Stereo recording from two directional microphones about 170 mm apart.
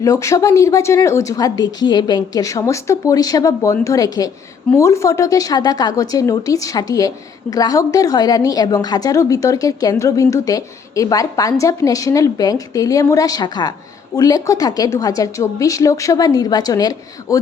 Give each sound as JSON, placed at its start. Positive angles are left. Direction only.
{"t": 0.0, "sound": "a woman's voice", "side_deg": 20}